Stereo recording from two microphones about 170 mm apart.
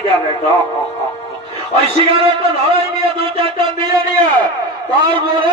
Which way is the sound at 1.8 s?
35° right (ahead or behind).